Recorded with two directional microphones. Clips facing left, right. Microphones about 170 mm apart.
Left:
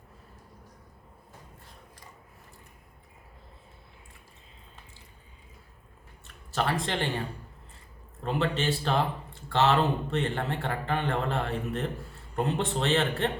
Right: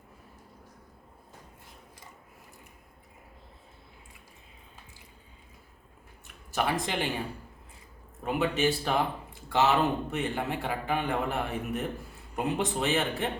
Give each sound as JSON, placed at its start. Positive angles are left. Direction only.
{"t": 6.2, "sound": "speech", "side_deg": -15}
{"t": 8.2, "sound": "a man's voice", "side_deg": -10}